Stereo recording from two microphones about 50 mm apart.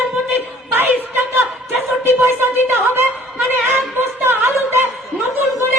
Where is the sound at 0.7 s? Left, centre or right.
Right.